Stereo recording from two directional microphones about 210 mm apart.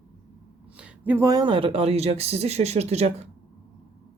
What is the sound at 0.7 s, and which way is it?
Speech, 5° right (ahead or behind).